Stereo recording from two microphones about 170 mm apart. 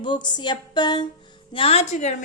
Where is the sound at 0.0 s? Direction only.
25° left (ahead or behind).